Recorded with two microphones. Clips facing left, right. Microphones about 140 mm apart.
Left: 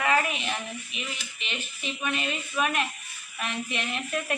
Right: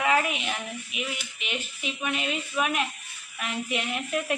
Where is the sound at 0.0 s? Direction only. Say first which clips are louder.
Right 1 dB; 15° right (ahead or behind).